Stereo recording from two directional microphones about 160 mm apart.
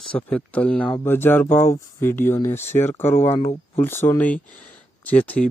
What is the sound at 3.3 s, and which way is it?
Speech, 40° left (ahead or behind).